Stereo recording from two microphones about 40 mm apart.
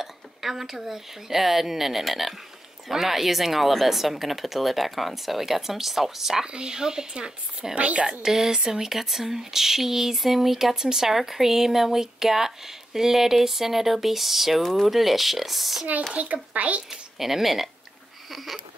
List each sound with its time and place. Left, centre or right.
0.0 s speech: centre
6.4 s speech: right
7.7 s a child's voice: right
8.2 s speech: centre
16.1 s a child's voice: right
16.9 s speech: centre
18.3 s a sound: centre